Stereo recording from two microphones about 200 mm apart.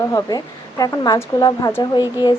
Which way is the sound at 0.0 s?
15° left (ahead or behind).